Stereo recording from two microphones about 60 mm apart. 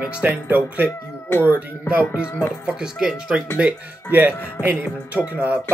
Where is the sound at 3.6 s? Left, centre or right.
Right.